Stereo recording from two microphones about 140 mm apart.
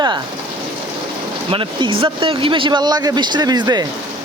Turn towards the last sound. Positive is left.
turn(degrees=-30)  # may be behind; listen again after turning